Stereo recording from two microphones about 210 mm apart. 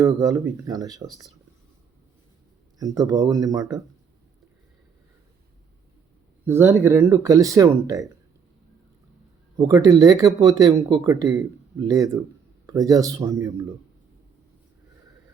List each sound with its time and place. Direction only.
0.0 s speech: 15° right (ahead or behind)
2.7 s speech: 15° right (ahead or behind)
6.4 s speech: 10° right (ahead or behind)
9.6 s speech: 20° right (ahead or behind)